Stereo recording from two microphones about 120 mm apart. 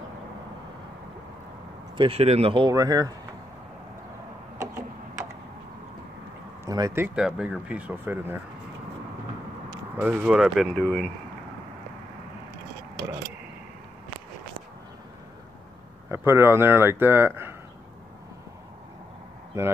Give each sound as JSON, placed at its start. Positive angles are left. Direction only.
{"t": 2.0, "sound": "speech", "side_deg": -50}
{"t": 2.5, "sound": "speech", "side_deg": -35}
{"t": 4.6, "sound": "a sound", "side_deg": -25}
{"t": 6.6, "sound": "a sound", "side_deg": -30}
{"t": 7.2, "sound": "speech", "side_deg": -5}
{"t": 9.9, "sound": "speech", "side_deg": -15}
{"t": 10.5, "sound": "speech", "side_deg": 0}
{"t": 10.8, "sound": "speech", "side_deg": 15}
{"t": 16.1, "sound": "speech", "side_deg": -20}